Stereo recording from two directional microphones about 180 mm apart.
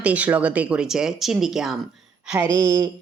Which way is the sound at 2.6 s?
25° right (ahead or behind).